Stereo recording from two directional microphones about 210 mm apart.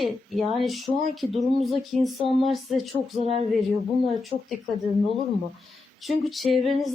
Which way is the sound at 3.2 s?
30° right (ahead or behind).